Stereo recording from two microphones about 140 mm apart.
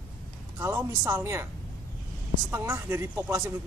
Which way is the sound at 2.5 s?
20° right (ahead or behind).